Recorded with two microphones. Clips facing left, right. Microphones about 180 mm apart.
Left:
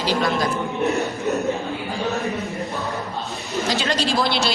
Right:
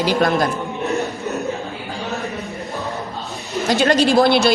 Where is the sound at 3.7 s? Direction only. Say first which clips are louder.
Right 8 dB; 55° right (ahead or behind).